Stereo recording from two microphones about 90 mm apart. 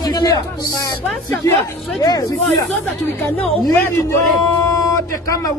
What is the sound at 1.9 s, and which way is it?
Speech, 45° left (ahead or behind).